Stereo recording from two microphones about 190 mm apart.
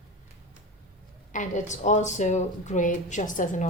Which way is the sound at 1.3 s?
40° left (ahead or behind).